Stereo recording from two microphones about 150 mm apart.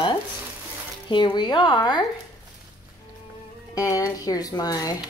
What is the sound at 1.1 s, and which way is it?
Speech, 30° left (ahead or behind).